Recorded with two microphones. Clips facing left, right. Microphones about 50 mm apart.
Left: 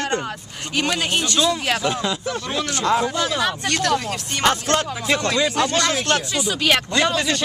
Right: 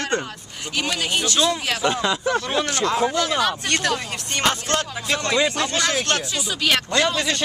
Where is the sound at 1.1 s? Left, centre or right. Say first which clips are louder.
Left 1 dB; centre.